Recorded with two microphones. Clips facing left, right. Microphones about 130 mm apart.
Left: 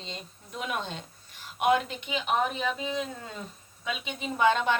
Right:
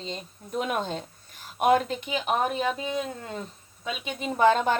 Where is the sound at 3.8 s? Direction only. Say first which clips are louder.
Right 2 dB; 40° right (ahead or behind).